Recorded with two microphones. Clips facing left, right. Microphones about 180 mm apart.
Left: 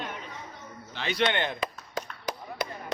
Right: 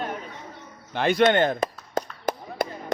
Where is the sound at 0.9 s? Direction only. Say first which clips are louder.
Right 8 dB; 50° right (ahead or behind).